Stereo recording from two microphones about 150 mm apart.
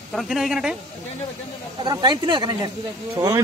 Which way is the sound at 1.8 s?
30° right (ahead or behind).